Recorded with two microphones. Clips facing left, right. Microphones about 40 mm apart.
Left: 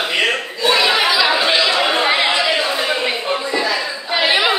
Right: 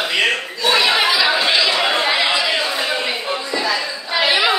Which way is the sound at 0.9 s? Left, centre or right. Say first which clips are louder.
Left 1 dB; centre.